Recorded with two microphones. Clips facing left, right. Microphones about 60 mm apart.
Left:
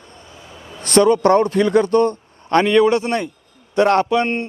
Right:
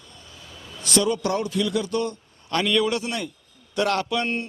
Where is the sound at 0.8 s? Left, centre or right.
Left.